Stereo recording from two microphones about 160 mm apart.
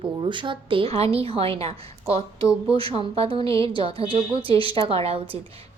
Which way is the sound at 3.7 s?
35° right (ahead or behind).